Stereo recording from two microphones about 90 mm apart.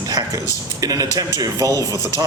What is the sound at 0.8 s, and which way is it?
Speech, 40° right (ahead or behind).